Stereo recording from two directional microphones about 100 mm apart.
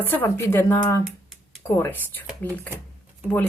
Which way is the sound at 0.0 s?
20° left (ahead or behind).